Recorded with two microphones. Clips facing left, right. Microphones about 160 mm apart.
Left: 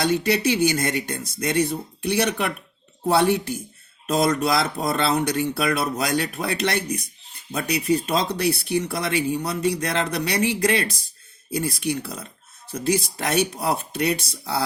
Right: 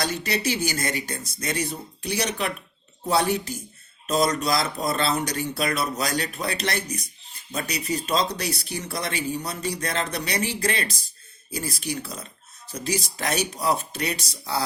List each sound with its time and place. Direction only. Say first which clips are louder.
0.1 s speech: left 6 dB; 60° left (ahead or behind)